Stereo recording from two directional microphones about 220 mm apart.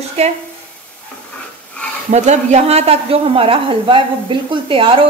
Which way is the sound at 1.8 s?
5° left (ahead or behind).